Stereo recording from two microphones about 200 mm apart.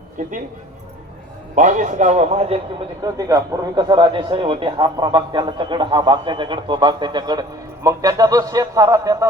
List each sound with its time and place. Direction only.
1.5 s a man's voice: 40° right (ahead or behind)
3.0 s a man's voice: 20° right (ahead or behind)